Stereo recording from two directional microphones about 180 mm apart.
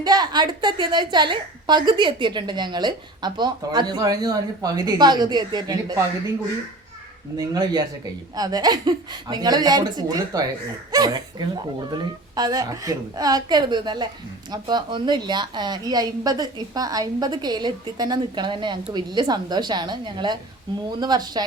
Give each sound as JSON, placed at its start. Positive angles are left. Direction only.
{"t": 0.0, "sound": "a woman's voice", "side_deg": -25}
{"t": 7.3, "sound": "a woman's voice", "side_deg": -20}